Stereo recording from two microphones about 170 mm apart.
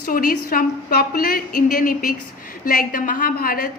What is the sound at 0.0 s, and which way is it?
A woman's voice, 55° left (ahead or behind).